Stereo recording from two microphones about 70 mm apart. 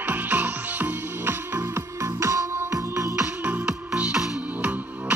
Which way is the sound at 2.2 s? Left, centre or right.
Right.